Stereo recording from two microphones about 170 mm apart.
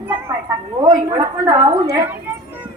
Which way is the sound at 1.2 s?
20° right (ahead or behind).